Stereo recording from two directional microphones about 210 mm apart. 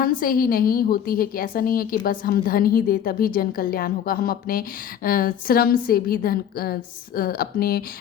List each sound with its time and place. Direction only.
0.0 s a woman's voice: 40° left (ahead or behind)